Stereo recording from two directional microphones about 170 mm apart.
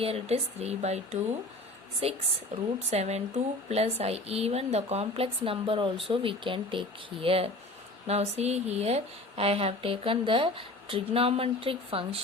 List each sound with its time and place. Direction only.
0.0 s speech: 35° right (ahead or behind)